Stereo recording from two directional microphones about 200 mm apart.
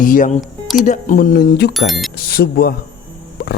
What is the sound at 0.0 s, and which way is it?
Speech, 40° left (ahead or behind).